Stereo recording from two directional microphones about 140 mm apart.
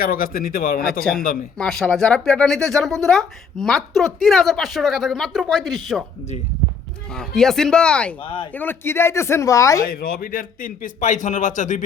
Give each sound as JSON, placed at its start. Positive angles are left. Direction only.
{"t": 0.0, "sound": "speech", "side_deg": 90}
{"t": 1.5, "sound": "a woman's voice", "side_deg": 5}
{"t": 7.1, "sound": "a woman's voice", "side_deg": 5}
{"t": 8.2, "sound": "speech", "side_deg": 35}
{"t": 8.5, "sound": "speech", "side_deg": 15}
{"t": 9.8, "sound": "a man's voice", "side_deg": 90}